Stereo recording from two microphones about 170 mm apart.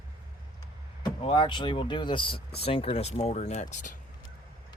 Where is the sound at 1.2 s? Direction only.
30° left (ahead or behind); by 4.0 s 50° left (ahead or behind).